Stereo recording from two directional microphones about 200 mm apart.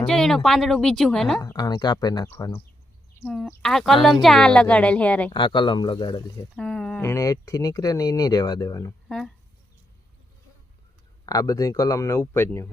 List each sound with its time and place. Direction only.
0.1 s a woman's voice: centre (ahead or behind)
1.4 s speech: 15° left (ahead or behind)
3.2 s a woman's voice: centre (ahead or behind)
5.3 s speech: 25° left (ahead or behind)
6.6 s speech: 5° left (ahead or behind)
9.0 s speech: 5° left (ahead or behind)
11.3 s speech: 15° left (ahead or behind)